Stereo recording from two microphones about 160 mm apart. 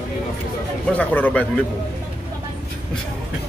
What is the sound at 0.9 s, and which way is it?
Speech, 10° left (ahead or behind).